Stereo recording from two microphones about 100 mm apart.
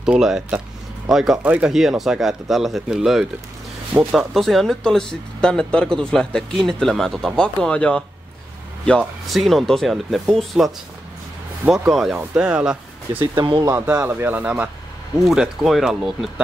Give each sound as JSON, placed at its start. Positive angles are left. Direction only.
{"t": 0.0, "sound": "speech", "side_deg": -5}
{"t": 1.4, "sound": "speech", "side_deg": -15}
{"t": 1.7, "sound": "speech", "side_deg": -5}
{"t": 9.3, "sound": "speech", "side_deg": 0}
{"t": 11.9, "sound": "speech", "side_deg": 0}
{"t": 13.3, "sound": "speech", "side_deg": -45}
{"t": 13.7, "sound": "speech", "side_deg": -25}
{"t": 15.2, "sound": "speech", "side_deg": -5}